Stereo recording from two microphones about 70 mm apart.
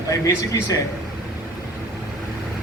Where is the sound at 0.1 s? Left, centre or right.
Left.